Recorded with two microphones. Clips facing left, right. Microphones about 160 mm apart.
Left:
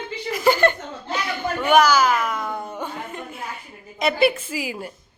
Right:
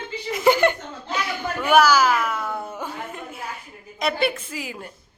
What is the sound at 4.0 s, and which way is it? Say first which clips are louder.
Speech: left 4 dB; 5° left (ahead or behind).